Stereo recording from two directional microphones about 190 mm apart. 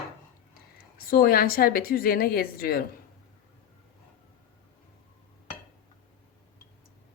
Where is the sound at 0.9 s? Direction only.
50° left (ahead or behind).